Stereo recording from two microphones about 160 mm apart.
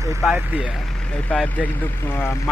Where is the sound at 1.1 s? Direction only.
10° left (ahead or behind).